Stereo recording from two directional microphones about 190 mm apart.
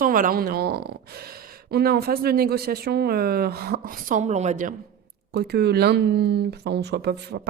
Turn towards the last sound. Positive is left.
turn(degrees=-60)  # may be behind; listen again after turning